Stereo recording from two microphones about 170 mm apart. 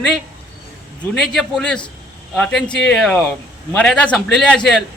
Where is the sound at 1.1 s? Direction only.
Centre (ahead or behind).